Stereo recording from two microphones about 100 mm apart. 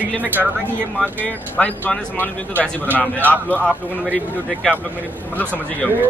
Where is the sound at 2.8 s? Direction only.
20° right (ahead or behind).